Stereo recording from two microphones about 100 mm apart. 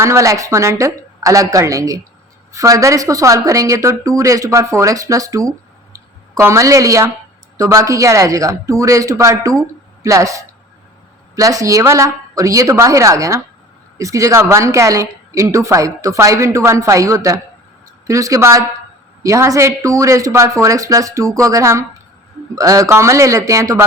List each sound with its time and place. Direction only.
0.0 s a woman's voice: 30° right (ahead or behind)